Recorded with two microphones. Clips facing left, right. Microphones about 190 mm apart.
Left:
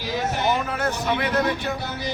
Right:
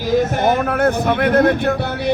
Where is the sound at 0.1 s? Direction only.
50° right (ahead or behind).